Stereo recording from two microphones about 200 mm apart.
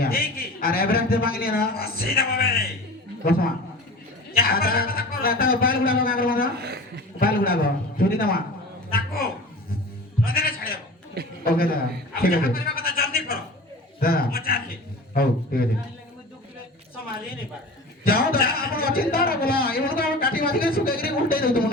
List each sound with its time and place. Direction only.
0.0 s a man's voice: 50° left (ahead or behind)
6.6 s a man's voice: 55° right (ahead or behind)
7.2 s a man's voice: 50° left (ahead or behind)
8.9 s a sound: 50° left (ahead or behind)
11.4 s a man's voice: 50° left (ahead or behind)
12.2 s chuckle: 50° left (ahead or behind)
14.0 s a man's voice: 50° left (ahead or behind)
18.0 s a man's voice: 50° left (ahead or behind)